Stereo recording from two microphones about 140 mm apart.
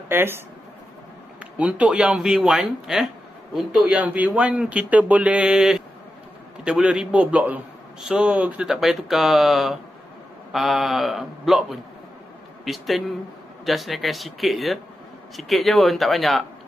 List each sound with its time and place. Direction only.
0.1 s speech: 15° right (ahead or behind)
1.6 s a man's voice: 10° right (ahead or behind)